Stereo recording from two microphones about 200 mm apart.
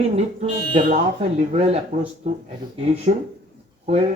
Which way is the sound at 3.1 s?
40° right (ahead or behind).